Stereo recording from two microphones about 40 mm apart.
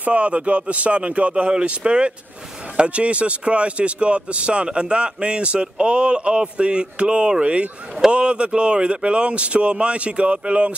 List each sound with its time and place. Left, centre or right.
0.1 s a man's voice: right